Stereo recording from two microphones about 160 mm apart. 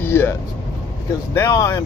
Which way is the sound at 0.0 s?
15° left (ahead or behind).